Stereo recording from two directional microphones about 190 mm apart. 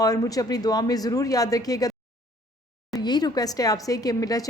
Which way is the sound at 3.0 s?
20° left (ahead or behind).